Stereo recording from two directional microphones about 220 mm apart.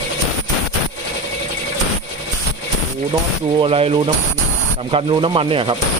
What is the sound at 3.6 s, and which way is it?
Speech, 25° right (ahead or behind).